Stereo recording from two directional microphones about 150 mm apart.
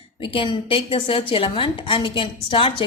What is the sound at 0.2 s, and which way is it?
A woman's voice, 35° left (ahead or behind).